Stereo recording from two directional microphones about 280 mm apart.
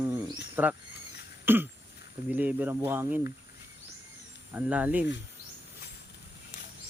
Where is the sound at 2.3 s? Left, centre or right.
Centre.